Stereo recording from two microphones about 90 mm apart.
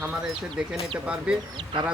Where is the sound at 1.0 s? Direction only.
10° right (ahead or behind).